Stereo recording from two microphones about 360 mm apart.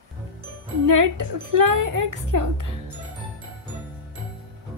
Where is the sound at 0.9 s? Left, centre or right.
Right.